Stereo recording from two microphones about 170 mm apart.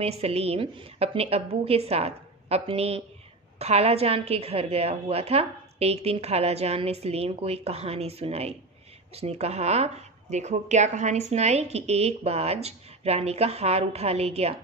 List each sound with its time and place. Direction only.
0.0 s a woman's voice: 35° right (ahead or behind)